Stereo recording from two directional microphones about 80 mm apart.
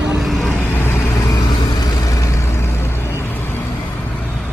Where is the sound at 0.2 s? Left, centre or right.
Centre.